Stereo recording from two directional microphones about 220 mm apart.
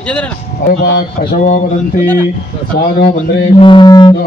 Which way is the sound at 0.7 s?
50° left (ahead or behind).